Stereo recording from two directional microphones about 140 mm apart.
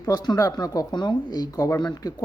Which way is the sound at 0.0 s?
30° left (ahead or behind).